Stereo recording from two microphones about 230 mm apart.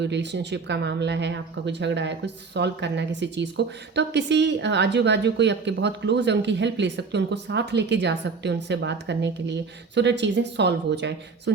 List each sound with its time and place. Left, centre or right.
0.0 s speech: right